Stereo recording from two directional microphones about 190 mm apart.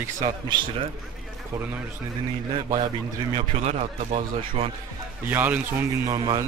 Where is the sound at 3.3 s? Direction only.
35° right (ahead or behind).